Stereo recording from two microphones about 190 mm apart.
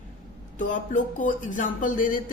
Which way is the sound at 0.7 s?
45° left (ahead or behind).